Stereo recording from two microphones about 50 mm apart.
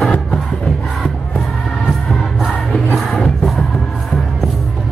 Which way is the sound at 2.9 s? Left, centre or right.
Centre.